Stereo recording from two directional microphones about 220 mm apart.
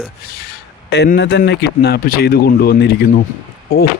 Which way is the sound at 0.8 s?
50° left (ahead or behind).